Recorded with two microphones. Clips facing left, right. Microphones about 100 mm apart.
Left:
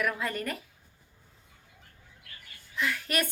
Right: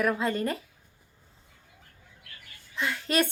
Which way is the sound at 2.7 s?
25° right (ahead or behind).